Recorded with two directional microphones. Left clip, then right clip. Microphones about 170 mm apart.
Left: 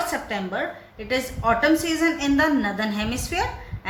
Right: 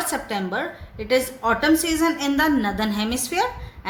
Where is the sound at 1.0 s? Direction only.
25° right (ahead or behind).